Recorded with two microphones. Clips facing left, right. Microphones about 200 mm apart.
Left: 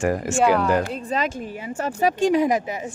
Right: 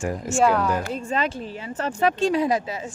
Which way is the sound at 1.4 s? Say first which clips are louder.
Left 1 dB; 10° left (ahead or behind).